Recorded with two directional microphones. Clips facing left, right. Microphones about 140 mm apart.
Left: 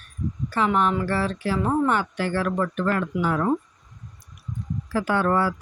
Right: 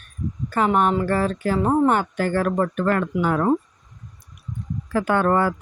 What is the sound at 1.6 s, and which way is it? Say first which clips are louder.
Speech: right 4 dB; 30° right (ahead or behind).